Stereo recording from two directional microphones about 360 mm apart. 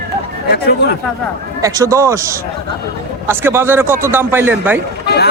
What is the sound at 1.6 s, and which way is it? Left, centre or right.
Speech, centre.